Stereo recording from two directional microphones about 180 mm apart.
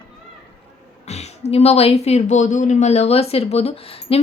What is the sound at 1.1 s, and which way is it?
Speech, 35° left (ahead or behind).